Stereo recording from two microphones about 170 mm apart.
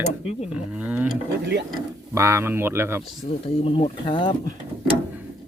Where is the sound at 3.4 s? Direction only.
35° left (ahead or behind).